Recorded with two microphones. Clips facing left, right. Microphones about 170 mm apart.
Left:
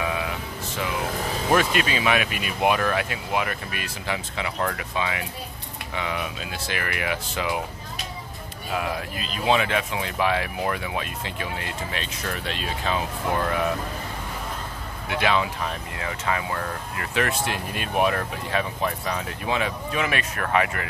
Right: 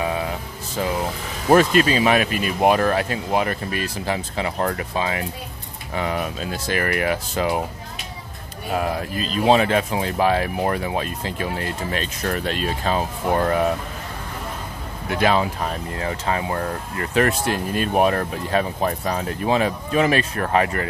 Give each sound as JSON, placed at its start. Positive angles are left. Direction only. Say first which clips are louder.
{"t": 0.0, "sound": "music", "louder": "right 3 dB", "side_deg": -35}
{"t": 1.5, "sound": "speech", "louder": "right 7 dB", "side_deg": -35}
{"t": 8.7, "sound": "speech", "louder": "right 5 dB", "side_deg": -40}
{"t": 15.0, "sound": "speech", "louder": "right 4 dB", "side_deg": -40}